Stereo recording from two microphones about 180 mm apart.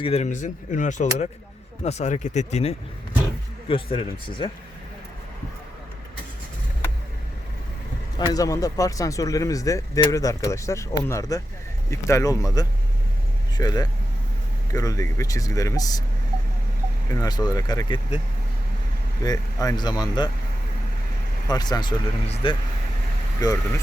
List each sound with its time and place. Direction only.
0.0 s speech: 35° left (ahead or behind)
3.9 s speech: 30° left (ahead or behind)
8.3 s speech: 20° left (ahead or behind)
17.1 s speech: 20° left (ahead or behind)
19.2 s speech: 20° left (ahead or behind)
21.4 s speech: 20° left (ahead or behind)